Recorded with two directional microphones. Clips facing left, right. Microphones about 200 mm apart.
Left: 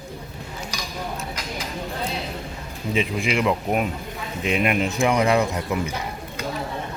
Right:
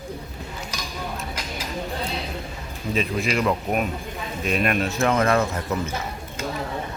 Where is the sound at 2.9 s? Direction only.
15° left (ahead or behind).